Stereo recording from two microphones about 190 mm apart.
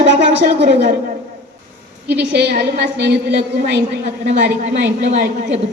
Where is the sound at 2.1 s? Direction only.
60° right (ahead or behind).